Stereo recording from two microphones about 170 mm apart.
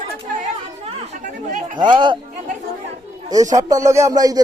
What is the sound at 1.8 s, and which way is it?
Speech, 25° right (ahead or behind).